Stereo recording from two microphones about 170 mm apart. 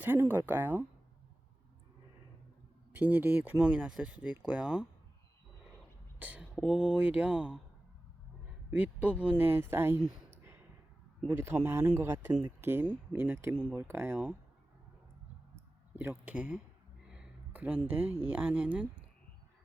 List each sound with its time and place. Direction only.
0.0 s speech: 10° right (ahead or behind)
2.9 s speech: 10° right (ahead or behind)
6.1 s a sound: 10° right (ahead or behind)
6.7 s speech: 5° right (ahead or behind)
8.7 s speech: 10° right (ahead or behind)
10.2 s a sound: 15° right (ahead or behind)
11.3 s speech: 15° right (ahead or behind)
12.3 s speech: 30° right (ahead or behind)
12.6 s speech: 10° right (ahead or behind)
16.0 s speech: 10° right (ahead or behind)
17.1 s a sound: 5° right (ahead or behind)
18.3 s speech: 10° right (ahead or behind)